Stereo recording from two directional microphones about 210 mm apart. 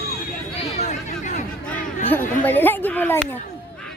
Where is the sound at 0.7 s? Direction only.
35° left (ahead or behind).